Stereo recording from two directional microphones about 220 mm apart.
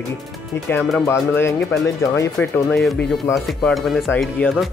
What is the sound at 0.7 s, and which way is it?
Speech, 5° left (ahead or behind).